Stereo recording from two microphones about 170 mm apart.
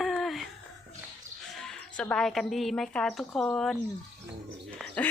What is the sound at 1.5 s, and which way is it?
A woman's voice, 5° left (ahead or behind).